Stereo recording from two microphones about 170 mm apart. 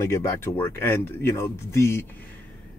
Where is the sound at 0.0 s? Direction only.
15° left (ahead or behind).